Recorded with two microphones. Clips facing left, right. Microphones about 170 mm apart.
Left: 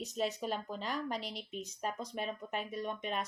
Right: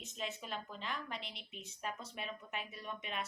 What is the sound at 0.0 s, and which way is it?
Speech, 40° left (ahead or behind).